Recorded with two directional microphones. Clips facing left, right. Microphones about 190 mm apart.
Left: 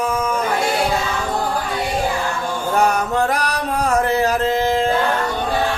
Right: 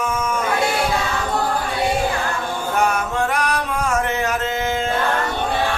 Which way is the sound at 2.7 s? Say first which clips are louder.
Left 3 dB; 35° left (ahead or behind).